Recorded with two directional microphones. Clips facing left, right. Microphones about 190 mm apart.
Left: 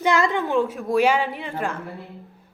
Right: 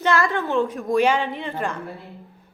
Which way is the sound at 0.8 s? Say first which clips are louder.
Right 1 dB; centre (ahead or behind).